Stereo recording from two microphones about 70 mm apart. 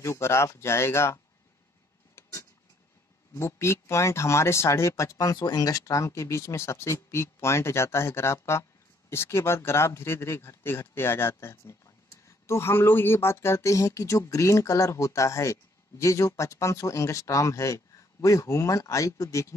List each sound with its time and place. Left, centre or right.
0.0 s speech: left
2.2 s vehicle: left
3.3 s speech: left